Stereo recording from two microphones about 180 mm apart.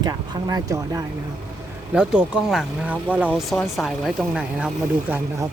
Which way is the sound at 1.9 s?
5° right (ahead or behind).